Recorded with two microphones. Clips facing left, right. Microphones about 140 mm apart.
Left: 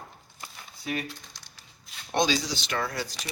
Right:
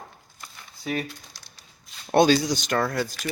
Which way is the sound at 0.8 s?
Centre (ahead or behind).